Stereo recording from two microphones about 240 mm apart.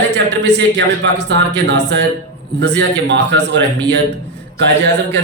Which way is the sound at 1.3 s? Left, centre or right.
Right.